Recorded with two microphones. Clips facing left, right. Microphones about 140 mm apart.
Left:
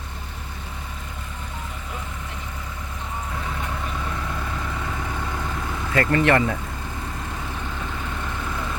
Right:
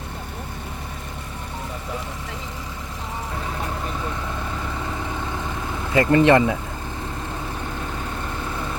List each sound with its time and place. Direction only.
5.9 s speech: 15° right (ahead or behind)